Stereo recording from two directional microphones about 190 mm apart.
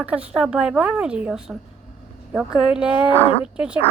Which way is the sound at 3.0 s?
30° left (ahead or behind).